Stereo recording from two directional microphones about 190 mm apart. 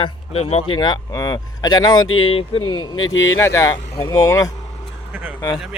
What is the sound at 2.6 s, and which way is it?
Speech, 90° left.